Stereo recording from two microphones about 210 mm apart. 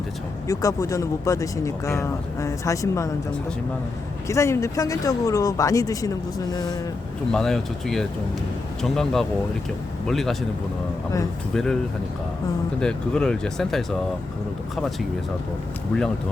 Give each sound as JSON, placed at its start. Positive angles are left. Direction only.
{"t": 0.4, "sound": "speech", "side_deg": 15}
{"t": 4.3, "sound": "speech", "side_deg": 15}
{"t": 7.3, "sound": "speech", "side_deg": 0}
{"t": 11.5, "sound": "speech", "side_deg": 0}
{"t": 12.8, "sound": "speech", "side_deg": 5}